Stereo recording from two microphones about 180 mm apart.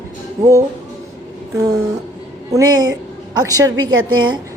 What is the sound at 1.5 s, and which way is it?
A man's voice, 20° right (ahead or behind).